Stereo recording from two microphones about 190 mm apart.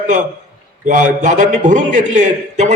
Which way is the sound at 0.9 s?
40° right (ahead or behind).